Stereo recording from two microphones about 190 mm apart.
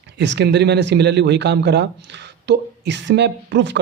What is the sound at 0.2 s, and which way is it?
Speech, 65° right (ahead or behind).